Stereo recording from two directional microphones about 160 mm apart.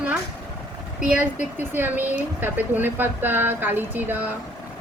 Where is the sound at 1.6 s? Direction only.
10° right (ahead or behind).